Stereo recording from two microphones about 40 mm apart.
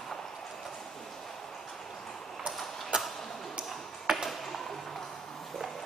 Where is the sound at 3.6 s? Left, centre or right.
Centre.